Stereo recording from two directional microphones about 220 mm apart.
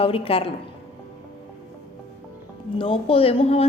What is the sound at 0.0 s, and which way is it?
Speech, 25° left (ahead or behind).